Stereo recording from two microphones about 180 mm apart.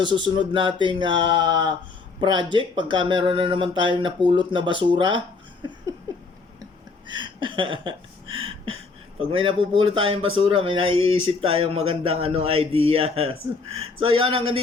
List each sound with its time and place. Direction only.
0.0 s speech: 25° right (ahead or behind)
7.1 s a sound: 25° right (ahead or behind)
11.3 s speech: 30° right (ahead or behind)